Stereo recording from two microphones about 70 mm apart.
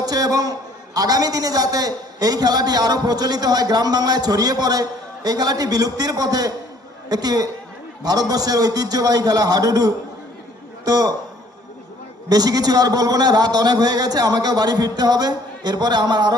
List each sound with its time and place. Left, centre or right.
0.0 s a sound: right
0.9 s a man's voice: right
12.3 s a man's voice: right